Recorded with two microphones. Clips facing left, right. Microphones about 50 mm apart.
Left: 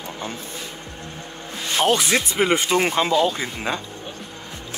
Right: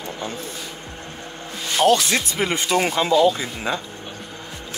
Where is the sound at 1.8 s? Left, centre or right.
Left.